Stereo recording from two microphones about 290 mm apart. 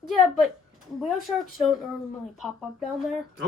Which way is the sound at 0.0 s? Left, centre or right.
Centre.